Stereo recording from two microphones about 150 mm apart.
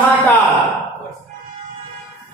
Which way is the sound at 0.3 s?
10° left (ahead or behind).